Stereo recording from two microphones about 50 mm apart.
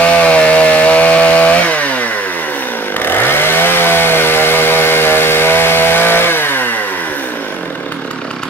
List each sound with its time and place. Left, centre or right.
0.0 s chainsaw: left
3.1 s chainsaw: left